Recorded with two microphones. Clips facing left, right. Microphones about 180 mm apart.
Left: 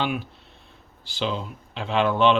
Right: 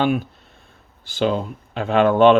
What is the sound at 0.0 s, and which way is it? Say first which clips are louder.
Speech: right 7 dB; 45° right (ahead or behind).